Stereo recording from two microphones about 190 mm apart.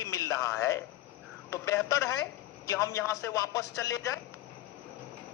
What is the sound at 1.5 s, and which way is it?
A man's voice, 15° left (ahead or behind).